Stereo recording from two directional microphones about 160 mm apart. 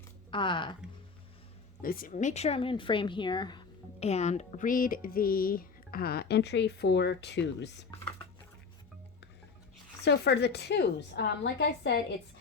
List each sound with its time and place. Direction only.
0.3 s speech: 30° left (ahead or behind)
1.8 s speech: 65° left (ahead or behind); by 3.7 s 30° left (ahead or behind)
4.0 s speech: 45° left (ahead or behind); by 7.8 s 90° left
10.0 s a woman's voice: 90° left